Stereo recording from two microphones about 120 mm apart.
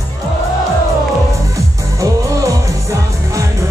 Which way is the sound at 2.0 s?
25° right (ahead or behind).